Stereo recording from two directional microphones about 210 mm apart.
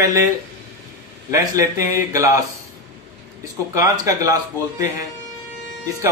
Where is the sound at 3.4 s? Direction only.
15° right (ahead or behind).